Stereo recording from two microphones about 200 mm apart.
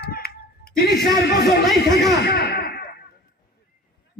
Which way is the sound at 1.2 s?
55° left (ahead or behind).